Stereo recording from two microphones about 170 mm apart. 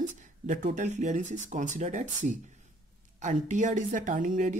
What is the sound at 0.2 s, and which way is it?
Speech, 45° right (ahead or behind).